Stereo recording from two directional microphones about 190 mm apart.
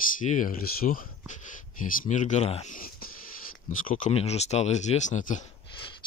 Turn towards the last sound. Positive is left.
turn(degrees=40)  # may be behind; listen again after turning